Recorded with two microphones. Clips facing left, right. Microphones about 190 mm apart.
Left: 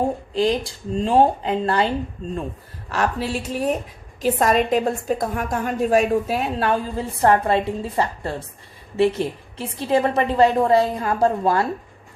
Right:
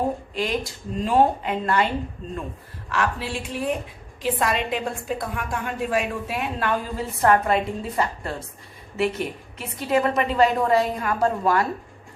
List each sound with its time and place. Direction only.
0.3 s speech: 30° left (ahead or behind)
2.9 s a woman's voice: 40° left (ahead or behind)